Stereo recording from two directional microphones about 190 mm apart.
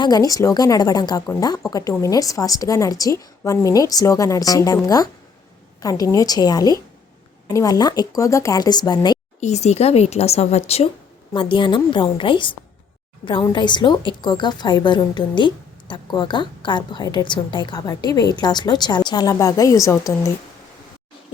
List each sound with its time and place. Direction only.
0.0 s a woman's voice: 20° left (ahead or behind)
5.8 s a woman's voice: 20° left (ahead or behind)
9.4 s a woman's voice: 35° left (ahead or behind); by 20.3 s 15° left (ahead or behind)